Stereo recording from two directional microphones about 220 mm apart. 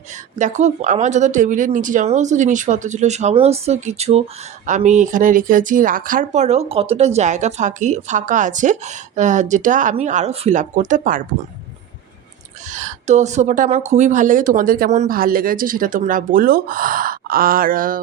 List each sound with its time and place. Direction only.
0.3 s speech: 35° right (ahead or behind)
12.7 s speech: 35° right (ahead or behind)